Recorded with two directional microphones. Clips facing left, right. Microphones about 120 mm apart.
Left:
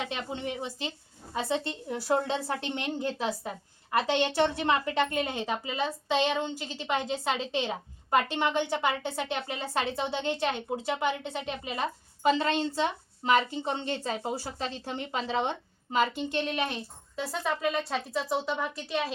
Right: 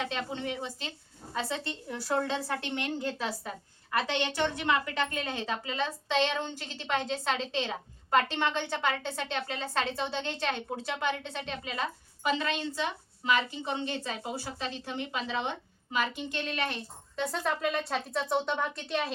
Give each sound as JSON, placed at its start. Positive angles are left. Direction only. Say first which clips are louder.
{"t": 0.1, "sound": "a woman's voice", "louder": "even", "side_deg": 15}
{"t": 4.4, "sound": "a woman's voice", "louder": "left 3 dB", "side_deg": 30}
{"t": 12.2, "sound": "a woman's voice", "louder": "left 5 dB", "side_deg": 30}
{"t": 16.3, "sound": "a woman's voice", "louder": "left 3 dB", "side_deg": 15}
{"t": 17.2, "sound": "speech", "louder": "even", "side_deg": 0}